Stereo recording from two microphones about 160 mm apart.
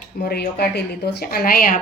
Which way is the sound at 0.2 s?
80° left.